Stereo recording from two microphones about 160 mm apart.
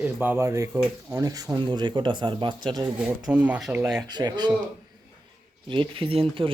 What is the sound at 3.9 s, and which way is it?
Speech, 25° right (ahead or behind).